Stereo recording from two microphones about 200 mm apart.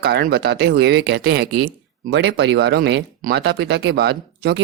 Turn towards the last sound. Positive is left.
turn(degrees=-55)  # may be behind; listen again after turning